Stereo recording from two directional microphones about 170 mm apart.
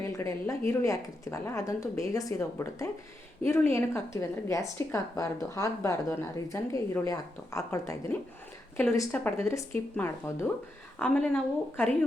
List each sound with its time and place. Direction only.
0.1 s speech: 15° left (ahead or behind)